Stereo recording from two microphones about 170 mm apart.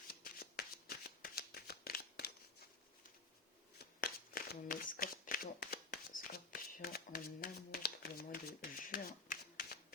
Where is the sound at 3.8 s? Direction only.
65° left (ahead or behind).